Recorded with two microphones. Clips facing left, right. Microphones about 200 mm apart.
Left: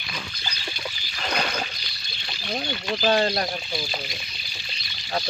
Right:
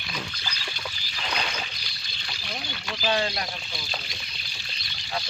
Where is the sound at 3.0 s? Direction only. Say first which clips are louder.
Left 5 dB; 45° left (ahead or behind).